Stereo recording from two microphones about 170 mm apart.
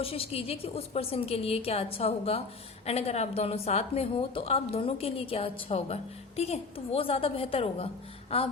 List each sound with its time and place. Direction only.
0.0 s a woman's voice: 35° left (ahead or behind)